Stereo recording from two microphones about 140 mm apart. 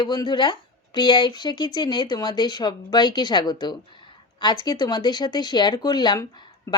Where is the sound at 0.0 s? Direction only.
30° left (ahead or behind).